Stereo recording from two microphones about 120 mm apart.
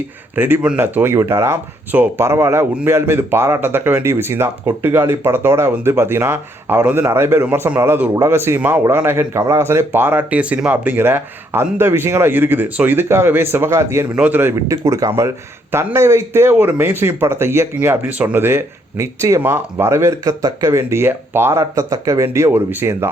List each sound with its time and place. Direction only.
0.3 s speech: 15° right (ahead or behind)
14.5 s speech: 25° right (ahead or behind)